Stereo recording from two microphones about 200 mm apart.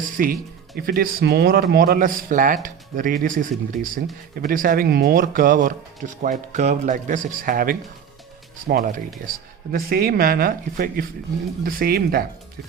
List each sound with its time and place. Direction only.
0.2 s speech: 45° right (ahead or behind)